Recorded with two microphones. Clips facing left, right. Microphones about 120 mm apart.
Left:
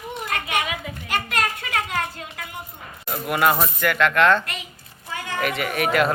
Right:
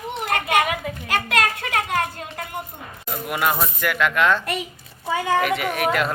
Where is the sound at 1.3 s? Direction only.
90° right.